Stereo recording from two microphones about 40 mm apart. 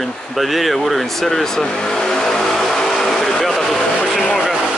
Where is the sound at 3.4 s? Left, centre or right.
Centre.